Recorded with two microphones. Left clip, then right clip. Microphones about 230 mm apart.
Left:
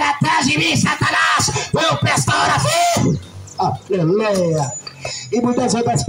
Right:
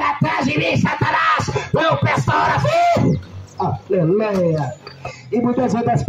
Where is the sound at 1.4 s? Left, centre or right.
Left.